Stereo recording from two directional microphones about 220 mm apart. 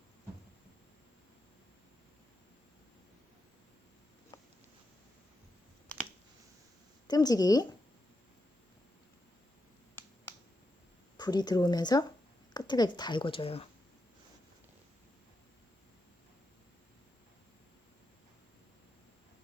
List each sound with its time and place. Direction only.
7.1 s a woman's voice: 15° left (ahead or behind)
11.2 s speech: 20° left (ahead or behind)